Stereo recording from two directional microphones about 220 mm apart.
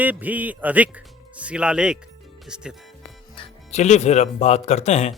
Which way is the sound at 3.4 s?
30° left (ahead or behind).